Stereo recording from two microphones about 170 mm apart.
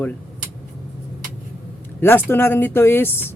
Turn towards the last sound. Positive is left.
turn(degrees=15)  # may be behind; listen again after turning